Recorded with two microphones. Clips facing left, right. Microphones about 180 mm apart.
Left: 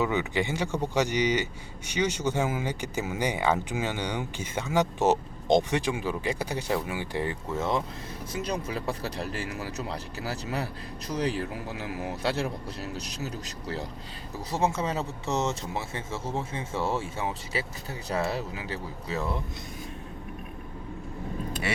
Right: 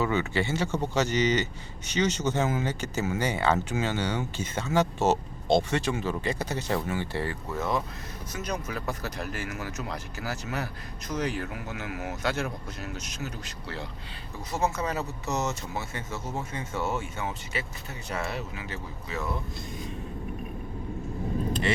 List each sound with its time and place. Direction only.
0.0 s speech: 15° left (ahead or behind); by 19.3 s 35° left (ahead or behind)